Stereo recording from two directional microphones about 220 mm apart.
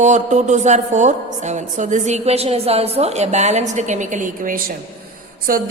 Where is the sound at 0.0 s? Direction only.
35° right (ahead or behind).